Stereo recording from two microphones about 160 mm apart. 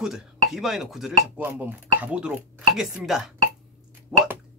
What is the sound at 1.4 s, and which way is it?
Speech, 10° right (ahead or behind).